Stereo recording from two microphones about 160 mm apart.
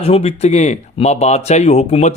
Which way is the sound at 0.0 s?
40° left (ahead or behind).